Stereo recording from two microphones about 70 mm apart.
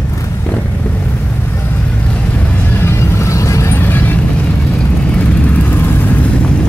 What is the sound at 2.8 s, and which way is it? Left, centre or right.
Vehicle, left.